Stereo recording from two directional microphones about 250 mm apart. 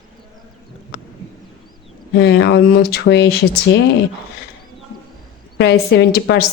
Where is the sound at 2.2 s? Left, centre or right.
Left.